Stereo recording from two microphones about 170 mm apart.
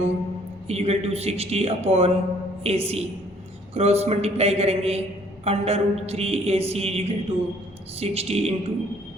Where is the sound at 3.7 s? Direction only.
35° right (ahead or behind).